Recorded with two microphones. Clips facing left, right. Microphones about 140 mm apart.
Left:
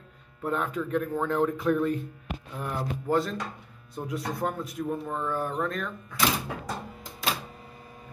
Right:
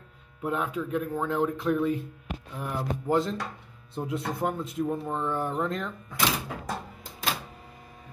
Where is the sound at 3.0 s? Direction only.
20° right (ahead or behind).